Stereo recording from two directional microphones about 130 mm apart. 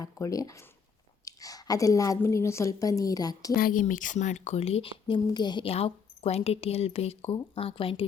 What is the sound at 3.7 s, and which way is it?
Speech, 85° left.